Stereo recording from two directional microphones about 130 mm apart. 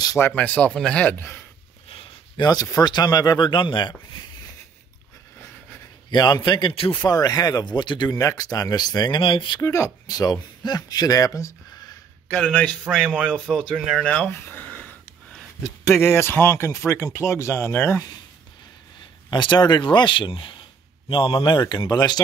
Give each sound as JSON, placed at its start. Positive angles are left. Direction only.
{"t": 0.0, "sound": "a sound", "side_deg": 25}
{"t": 0.4, "sound": "speech", "side_deg": 10}
{"t": 1.9, "sound": "a sound", "side_deg": 45}
{"t": 2.4, "sound": "speech", "side_deg": 30}
{"t": 6.0, "sound": "speech", "side_deg": 35}
{"t": 7.1, "sound": "speech", "side_deg": 30}
{"t": 8.2, "sound": "speech", "side_deg": 25}
{"t": 9.6, "sound": "speech", "side_deg": 25}
{"t": 12.3, "sound": "speech", "side_deg": 10}
{"t": 19.3, "sound": "speech", "side_deg": 35}